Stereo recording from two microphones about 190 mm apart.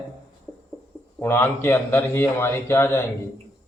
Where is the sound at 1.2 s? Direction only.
10° left (ahead or behind).